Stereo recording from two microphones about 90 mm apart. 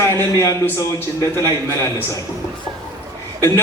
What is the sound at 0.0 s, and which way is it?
A man's voice, 30° left (ahead or behind).